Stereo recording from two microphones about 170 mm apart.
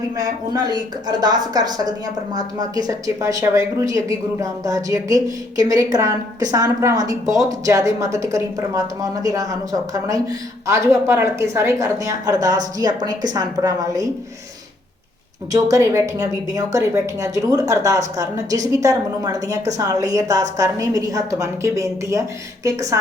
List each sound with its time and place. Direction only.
0.2 s a woman's voice: 25° right (ahead or behind)
15.5 s a woman's voice: 20° right (ahead or behind)